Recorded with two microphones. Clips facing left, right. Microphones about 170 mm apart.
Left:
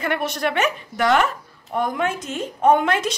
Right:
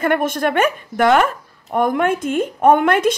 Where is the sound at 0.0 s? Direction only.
50° right (ahead or behind).